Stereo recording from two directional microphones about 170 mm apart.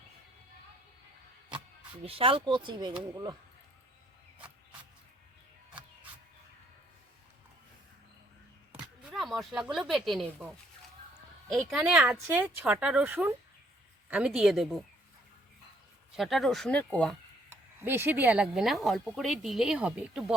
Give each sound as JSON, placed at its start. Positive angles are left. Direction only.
{"t": 2.0, "sound": "speech", "side_deg": -35}
{"t": 9.0, "sound": "speech", "side_deg": 0}
{"t": 11.4, "sound": "speech", "side_deg": 0}
{"t": 16.1, "sound": "speech", "side_deg": 0}
{"t": 17.5, "sound": "speech", "side_deg": -10}